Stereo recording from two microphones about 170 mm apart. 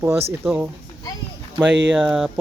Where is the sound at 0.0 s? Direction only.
15° right (ahead or behind).